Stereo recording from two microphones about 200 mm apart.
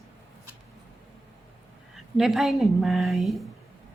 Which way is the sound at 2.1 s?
Centre (ahead or behind).